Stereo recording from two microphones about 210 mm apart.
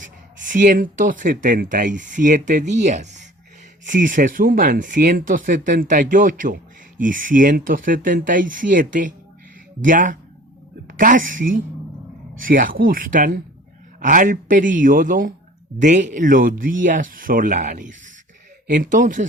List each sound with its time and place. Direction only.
0.0 s a woman's voice: 35° right (ahead or behind)